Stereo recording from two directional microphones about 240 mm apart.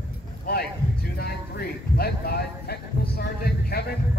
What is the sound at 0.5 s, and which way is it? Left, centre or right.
Speech, left.